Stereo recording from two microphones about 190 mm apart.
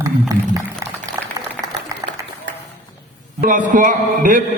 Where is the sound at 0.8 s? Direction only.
20° right (ahead or behind).